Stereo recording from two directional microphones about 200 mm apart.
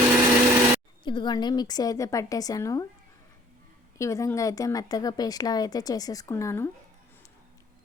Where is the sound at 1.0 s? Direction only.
20° left (ahead or behind).